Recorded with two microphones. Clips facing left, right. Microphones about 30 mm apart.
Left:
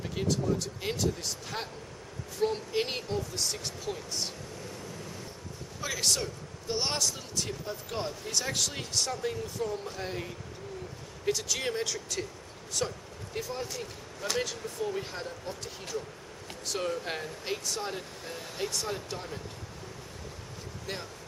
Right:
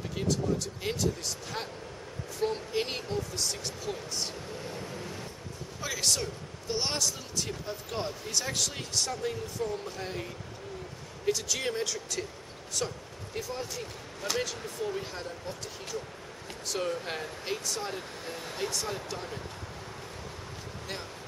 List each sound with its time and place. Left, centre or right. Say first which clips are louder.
0.1 s a man's voice: even; centre
4.6 s vehicle: right 3 dB; right
5.8 s a man's voice: even; centre
15.0 s a man's voice: even; centre
18.2 s speech: right 1 dB; right
18.6 s a man's voice: even; centre